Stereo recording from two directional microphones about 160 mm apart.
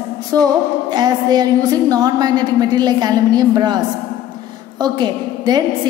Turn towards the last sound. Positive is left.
turn(degrees=-25)  # may be behind; listen again after turning